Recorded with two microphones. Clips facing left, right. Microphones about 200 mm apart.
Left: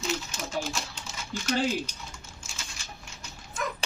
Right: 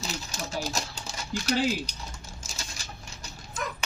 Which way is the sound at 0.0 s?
35° right (ahead or behind).